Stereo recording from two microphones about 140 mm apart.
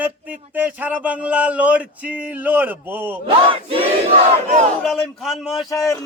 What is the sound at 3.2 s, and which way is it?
Battle cry, 40° right (ahead or behind).